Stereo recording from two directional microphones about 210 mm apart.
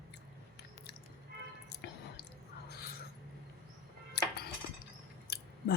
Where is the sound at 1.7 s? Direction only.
50° left (ahead or behind).